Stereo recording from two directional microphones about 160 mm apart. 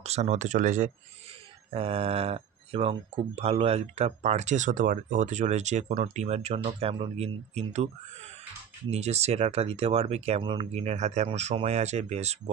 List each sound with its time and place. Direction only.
0.0 s speech: 45° right (ahead or behind)
1.7 s speech: 40° right (ahead or behind)
8.9 s speech: 40° right (ahead or behind)